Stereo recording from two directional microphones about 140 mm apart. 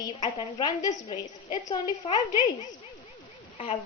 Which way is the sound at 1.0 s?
40° left (ahead or behind).